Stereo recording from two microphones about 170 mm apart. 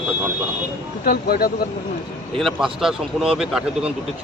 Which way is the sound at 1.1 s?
65° left (ahead or behind).